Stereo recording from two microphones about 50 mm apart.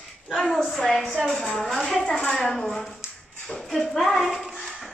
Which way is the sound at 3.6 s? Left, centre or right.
Centre.